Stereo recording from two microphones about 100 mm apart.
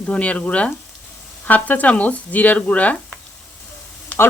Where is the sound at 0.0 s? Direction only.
10° left (ahead or behind).